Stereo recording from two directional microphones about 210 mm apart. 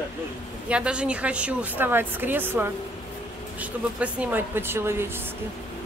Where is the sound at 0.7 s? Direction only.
5° right (ahead or behind).